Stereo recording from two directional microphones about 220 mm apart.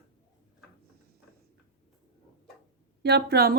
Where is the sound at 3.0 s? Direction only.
45° right (ahead or behind).